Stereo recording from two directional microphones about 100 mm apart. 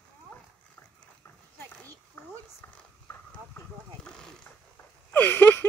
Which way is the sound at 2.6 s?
25° left (ahead or behind).